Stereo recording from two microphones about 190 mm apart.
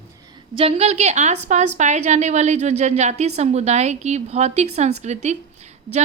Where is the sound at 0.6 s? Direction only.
35° right (ahead or behind).